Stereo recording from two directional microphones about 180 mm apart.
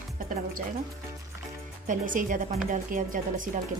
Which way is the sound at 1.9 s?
45° right (ahead or behind).